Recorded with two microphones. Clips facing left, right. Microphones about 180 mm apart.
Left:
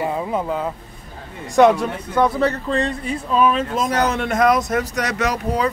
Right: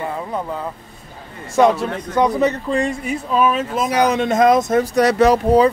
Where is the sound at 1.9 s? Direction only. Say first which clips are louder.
Right 2 dB; 10° left (ahead or behind).